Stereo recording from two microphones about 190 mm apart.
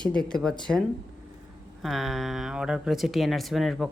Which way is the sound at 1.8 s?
Centre (ahead or behind).